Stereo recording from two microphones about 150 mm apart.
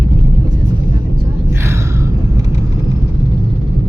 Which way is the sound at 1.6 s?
20° right (ahead or behind).